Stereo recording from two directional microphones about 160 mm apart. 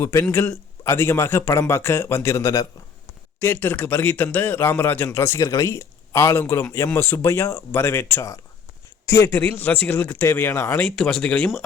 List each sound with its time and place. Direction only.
0.0 s a man's voice: 15° left (ahead or behind)